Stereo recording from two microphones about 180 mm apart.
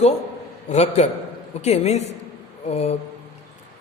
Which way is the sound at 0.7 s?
40° left (ahead or behind).